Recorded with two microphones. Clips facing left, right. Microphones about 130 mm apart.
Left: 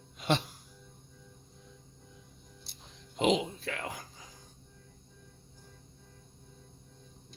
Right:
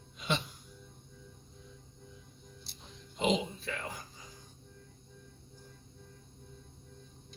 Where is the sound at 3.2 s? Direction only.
80° left.